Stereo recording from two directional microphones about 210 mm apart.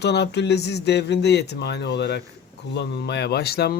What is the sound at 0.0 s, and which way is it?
Speech, 55° left (ahead or behind).